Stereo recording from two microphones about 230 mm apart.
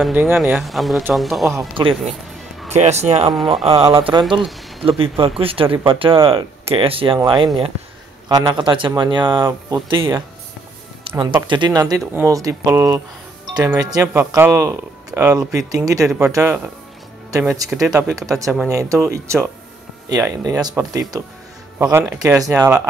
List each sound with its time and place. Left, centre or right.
0.0 s speech: centre
1.7 s speech: right